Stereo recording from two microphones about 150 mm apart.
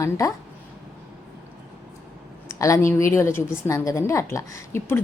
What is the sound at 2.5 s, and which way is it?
A woman's voice, 20° left (ahead or behind).